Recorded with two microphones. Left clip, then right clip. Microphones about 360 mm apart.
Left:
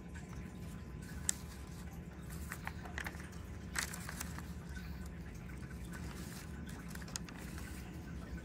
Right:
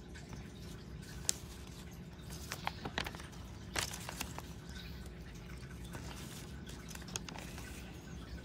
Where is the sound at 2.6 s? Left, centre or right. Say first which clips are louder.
Right 5 dB; right.